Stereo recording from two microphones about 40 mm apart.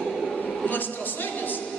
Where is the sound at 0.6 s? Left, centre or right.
Left.